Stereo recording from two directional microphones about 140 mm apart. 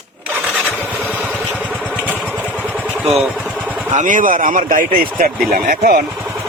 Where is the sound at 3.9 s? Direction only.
65° right (ahead or behind); by 6.0 s 90° right.